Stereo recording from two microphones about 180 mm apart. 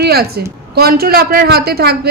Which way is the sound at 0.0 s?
60° right (ahead or behind).